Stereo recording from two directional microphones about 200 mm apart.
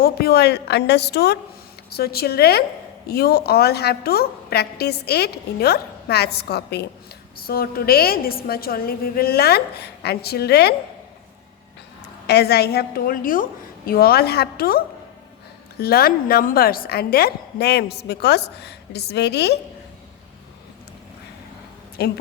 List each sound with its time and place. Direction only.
0.0 s a woman's voice: 50° left (ahead or behind)
12.3 s a woman's voice: 55° left (ahead or behind)
22.0 s a woman's voice: 55° left (ahead or behind)